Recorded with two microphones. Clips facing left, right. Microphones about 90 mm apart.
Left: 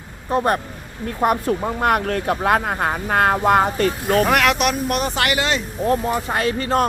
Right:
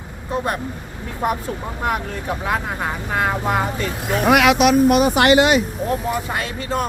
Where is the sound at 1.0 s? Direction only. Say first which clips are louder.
Left 4 dB; 60° left (ahead or behind).